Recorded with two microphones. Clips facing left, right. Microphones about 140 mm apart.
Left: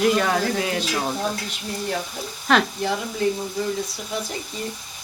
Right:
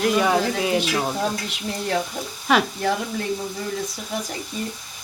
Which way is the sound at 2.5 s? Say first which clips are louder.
Even; 5° right (ahead or behind).